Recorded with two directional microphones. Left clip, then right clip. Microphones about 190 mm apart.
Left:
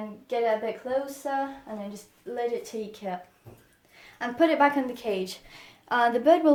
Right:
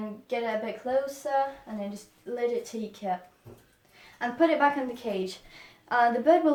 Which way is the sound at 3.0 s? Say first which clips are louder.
Right 3 dB; 45° left (ahead or behind).